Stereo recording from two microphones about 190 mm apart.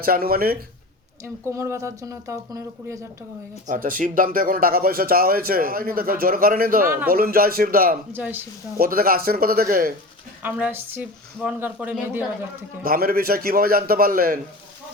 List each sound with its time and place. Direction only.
0.0 s speech: 50° right (ahead or behind)
1.2 s speech: 15° right (ahead or behind)
3.7 s speech: 45° right (ahead or behind)
8.1 s speech: 10° right (ahead or behind)
8.8 s speech: 50° right (ahead or behind)
10.4 s speech: 10° right (ahead or behind)
12.8 s speech: 50° right (ahead or behind)